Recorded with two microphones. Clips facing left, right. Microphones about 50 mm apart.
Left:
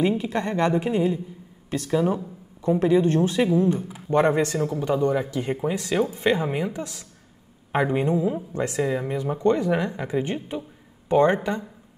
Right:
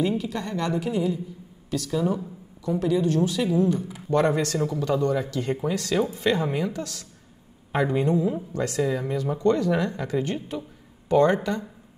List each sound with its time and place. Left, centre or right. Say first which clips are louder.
0.0 s a woman's voice: left 3 dB; left